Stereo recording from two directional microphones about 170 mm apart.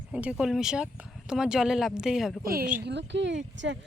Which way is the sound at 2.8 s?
90° right.